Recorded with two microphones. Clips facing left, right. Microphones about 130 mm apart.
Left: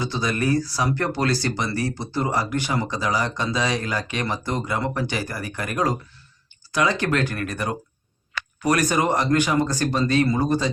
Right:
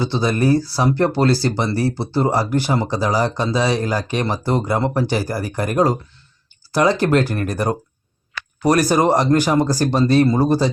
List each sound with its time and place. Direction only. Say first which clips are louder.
0.0 s speech: right 6 dB; 30° right (ahead or behind)